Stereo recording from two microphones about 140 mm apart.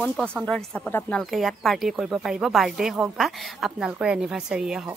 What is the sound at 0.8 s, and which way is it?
Speech, 15° left (ahead or behind).